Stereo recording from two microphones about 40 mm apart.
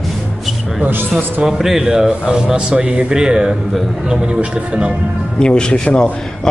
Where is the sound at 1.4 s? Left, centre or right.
Centre.